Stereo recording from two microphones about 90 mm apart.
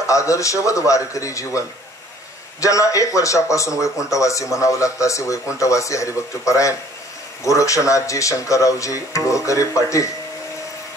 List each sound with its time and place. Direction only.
0.0 s speech: 35° left (ahead or behind)
2.6 s speech: 35° left (ahead or behind)